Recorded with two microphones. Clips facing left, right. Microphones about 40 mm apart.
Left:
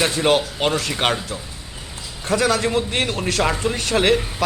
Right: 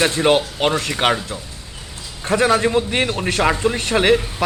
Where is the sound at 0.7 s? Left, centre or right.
Right.